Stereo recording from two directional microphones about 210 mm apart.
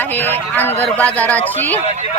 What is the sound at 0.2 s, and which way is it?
A man's voice, 10° left (ahead or behind).